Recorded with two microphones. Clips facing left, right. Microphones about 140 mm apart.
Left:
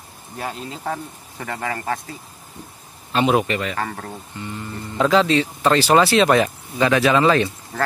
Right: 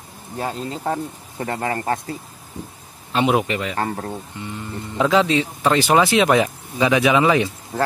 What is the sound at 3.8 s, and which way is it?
Speech, 30° right (ahead or behind).